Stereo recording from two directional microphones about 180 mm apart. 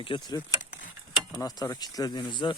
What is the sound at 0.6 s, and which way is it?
Mechanisms, 45° left (ahead or behind).